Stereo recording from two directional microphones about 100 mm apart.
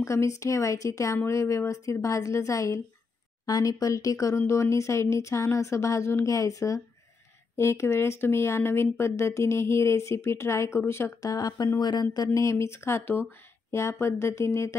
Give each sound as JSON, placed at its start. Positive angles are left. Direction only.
{"t": 0.0, "sound": "speech", "side_deg": 30}
{"t": 11.3, "sound": "speech", "side_deg": 40}
{"t": 12.4, "sound": "speech", "side_deg": 30}